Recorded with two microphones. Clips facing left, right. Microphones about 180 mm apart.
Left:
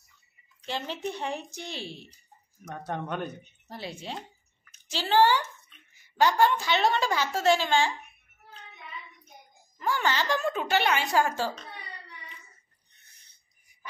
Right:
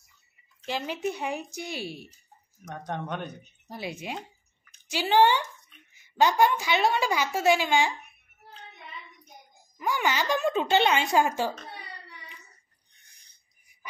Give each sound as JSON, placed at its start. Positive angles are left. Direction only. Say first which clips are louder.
{"t": 0.7, "sound": "a woman's voice", "louder": "right 3 dB", "side_deg": -10}
{"t": 2.7, "sound": "speech", "louder": "even", "side_deg": 5}
{"t": 3.6, "sound": "a woman's voice", "louder": "right 3 dB", "side_deg": -15}
{"t": 9.8, "sound": "a woman's voice", "louder": "even", "side_deg": -15}